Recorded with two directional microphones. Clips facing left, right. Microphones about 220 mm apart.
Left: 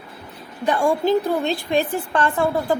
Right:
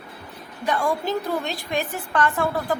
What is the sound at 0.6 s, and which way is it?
A woman's voice, 30° left (ahead or behind).